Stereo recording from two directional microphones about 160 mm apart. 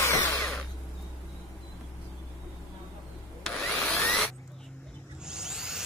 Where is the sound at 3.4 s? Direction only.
5° left (ahead or behind).